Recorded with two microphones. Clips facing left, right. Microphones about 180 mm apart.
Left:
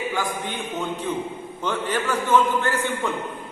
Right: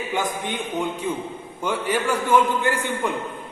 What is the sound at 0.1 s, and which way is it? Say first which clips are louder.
A man's voice: right 1 dB; 20° right (ahead or behind).